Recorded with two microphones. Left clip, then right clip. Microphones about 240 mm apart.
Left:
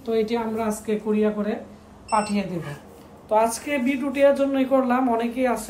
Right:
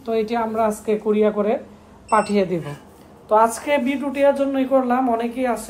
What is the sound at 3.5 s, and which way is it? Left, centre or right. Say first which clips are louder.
A woman's voice: right 5 dB; centre.